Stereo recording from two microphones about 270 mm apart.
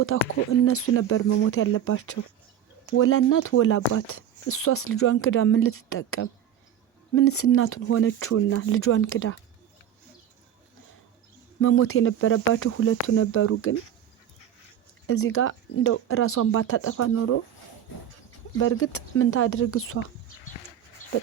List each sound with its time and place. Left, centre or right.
0.1 s speech: left
11.6 s speech: left
15.0 s speech: left
18.5 s speech: left